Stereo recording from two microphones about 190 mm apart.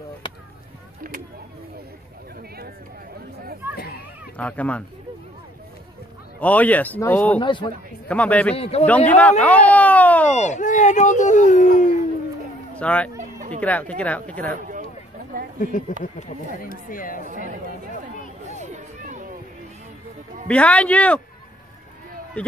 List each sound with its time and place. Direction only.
3.7 s a sound: 55° left (ahead or behind)
4.4 s speech: 5° left (ahead or behind)
6.4 s speech: 10° left (ahead or behind)
7.3 s speech: 25° left (ahead or behind)
8.1 s speech: 5° left (ahead or behind)
8.5 s speech: 30° left (ahead or behind)
8.8 s speech: 5° left (ahead or behind)
10.3 s speech: 40° left (ahead or behind)
12.7 s speech: 5° left (ahead or behind)
13.2 s a sound: 40° right (ahead or behind)
13.6 s speech: 5° left (ahead or behind)
16.0 s speech: 45° left (ahead or behind)
18.5 s a sound: 40° right (ahead or behind)
20.4 s speech: 5° left (ahead or behind)